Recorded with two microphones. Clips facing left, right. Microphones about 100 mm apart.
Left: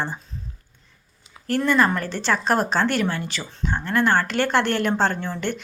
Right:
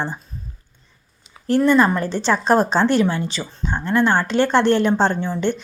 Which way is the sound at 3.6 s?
15° right (ahead or behind).